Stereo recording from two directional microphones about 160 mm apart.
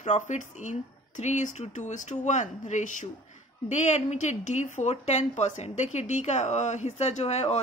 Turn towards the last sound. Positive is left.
turn(degrees=45)  # may be behind; listen again after turning